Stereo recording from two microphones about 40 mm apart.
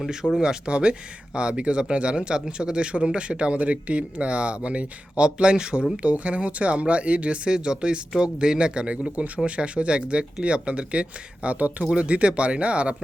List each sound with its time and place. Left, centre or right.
0.1 s speech: centre; by 7.5 s right
7.5 s speech: right